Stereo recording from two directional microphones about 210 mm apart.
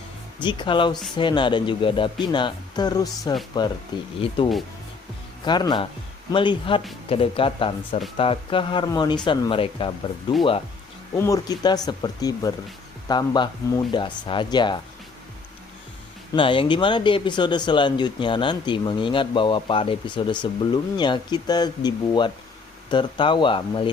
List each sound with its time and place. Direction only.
0.3 s speech: 20° left (ahead or behind)
16.3 s speech: 25° left (ahead or behind)